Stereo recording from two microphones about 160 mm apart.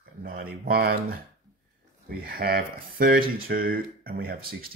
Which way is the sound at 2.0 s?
65° right (ahead or behind).